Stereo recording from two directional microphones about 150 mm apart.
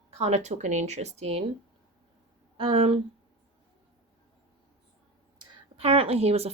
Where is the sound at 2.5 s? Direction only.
35° right (ahead or behind).